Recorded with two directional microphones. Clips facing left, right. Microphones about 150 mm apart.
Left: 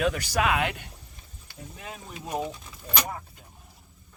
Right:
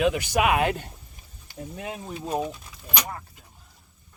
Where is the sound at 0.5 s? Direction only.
25° right (ahead or behind).